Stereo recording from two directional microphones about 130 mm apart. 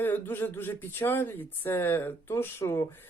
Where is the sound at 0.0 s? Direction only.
15° left (ahead or behind).